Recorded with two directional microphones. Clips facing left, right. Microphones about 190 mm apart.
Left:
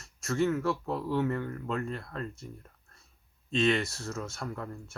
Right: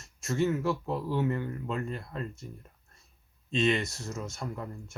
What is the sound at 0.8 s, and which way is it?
Speech, centre (ahead or behind).